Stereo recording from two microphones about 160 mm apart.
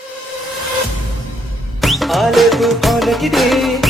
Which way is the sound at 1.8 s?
Centre (ahead or behind).